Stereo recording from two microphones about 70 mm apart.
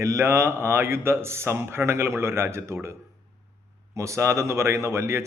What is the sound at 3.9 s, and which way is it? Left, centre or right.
A man's voice, right.